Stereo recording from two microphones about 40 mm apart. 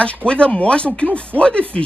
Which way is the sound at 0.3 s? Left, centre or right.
Left.